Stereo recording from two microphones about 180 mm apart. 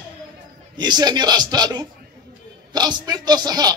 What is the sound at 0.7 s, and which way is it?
A man's voice, 25° right (ahead or behind).